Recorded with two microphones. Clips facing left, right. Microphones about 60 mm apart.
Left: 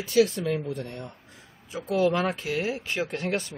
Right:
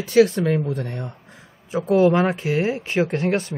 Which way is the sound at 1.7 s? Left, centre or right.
Right.